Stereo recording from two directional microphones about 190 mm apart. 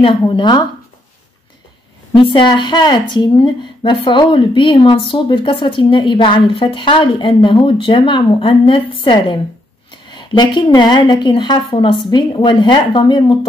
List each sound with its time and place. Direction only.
0.0 s speech: 30° left (ahead or behind)
2.1 s speech: 25° left (ahead or behind)